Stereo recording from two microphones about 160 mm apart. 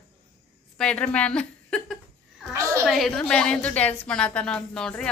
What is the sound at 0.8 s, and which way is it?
A woman's voice, 5° left (ahead or behind).